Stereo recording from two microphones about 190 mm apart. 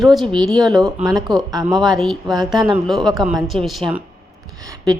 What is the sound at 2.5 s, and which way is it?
A woman's voice, centre (ahead or behind).